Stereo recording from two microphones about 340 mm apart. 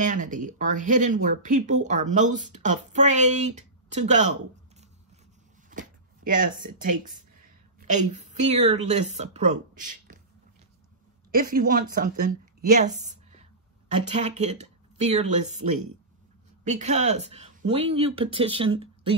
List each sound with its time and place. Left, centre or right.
0.0 s speech: right
5.7 s speech: right
11.3 s a woman's voice: right
16.6 s speech: right